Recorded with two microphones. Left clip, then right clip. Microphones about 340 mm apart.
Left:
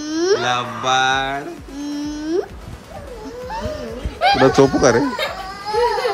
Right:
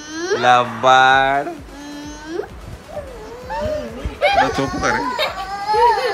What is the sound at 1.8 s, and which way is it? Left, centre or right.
Whale vocalization, left.